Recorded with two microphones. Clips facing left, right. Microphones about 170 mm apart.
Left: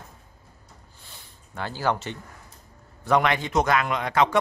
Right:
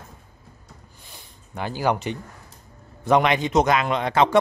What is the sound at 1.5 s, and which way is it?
A man's voice, 15° right (ahead or behind).